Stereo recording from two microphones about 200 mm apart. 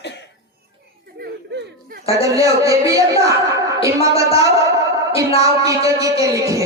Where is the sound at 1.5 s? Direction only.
55° right (ahead or behind).